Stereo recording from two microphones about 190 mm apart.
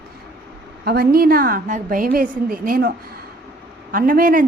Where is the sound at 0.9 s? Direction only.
50° right (ahead or behind).